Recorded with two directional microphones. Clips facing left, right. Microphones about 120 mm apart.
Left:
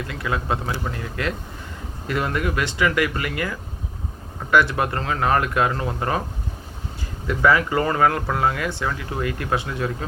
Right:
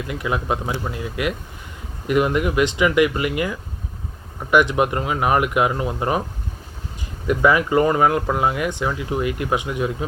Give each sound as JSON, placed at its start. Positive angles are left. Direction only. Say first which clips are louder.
{"t": 0.1, "sound": "speech", "louder": "right 3 dB", "side_deg": -20}
{"t": 7.3, "sound": "speech", "louder": "right 2 dB", "side_deg": -15}